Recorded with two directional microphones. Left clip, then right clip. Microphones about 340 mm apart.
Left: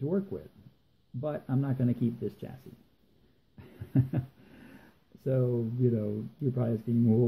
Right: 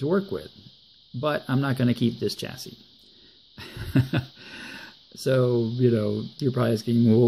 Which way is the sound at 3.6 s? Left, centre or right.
Centre.